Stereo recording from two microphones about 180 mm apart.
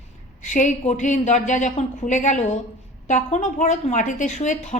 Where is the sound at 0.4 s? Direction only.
45° left (ahead or behind).